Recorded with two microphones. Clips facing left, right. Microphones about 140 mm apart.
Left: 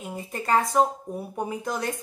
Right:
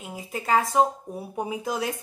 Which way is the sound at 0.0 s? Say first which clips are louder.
Left 1 dB; centre (ahead or behind).